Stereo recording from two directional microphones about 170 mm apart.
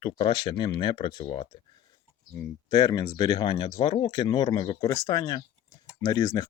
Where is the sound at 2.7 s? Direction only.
25° left (ahead or behind).